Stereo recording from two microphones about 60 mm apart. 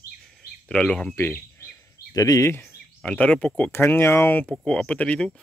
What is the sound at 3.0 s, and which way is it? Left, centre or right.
Speech, centre.